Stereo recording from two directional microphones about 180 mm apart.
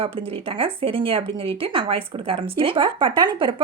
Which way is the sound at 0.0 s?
30° right (ahead or behind).